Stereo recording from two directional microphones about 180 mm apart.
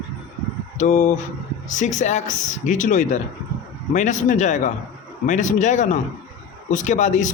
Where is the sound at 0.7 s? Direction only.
40° left (ahead or behind).